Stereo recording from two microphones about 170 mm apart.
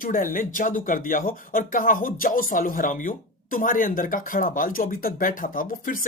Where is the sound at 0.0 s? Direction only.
55° left (ahead or behind).